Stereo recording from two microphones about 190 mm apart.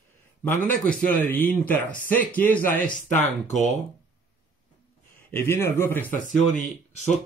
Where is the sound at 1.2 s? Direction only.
10° left (ahead or behind).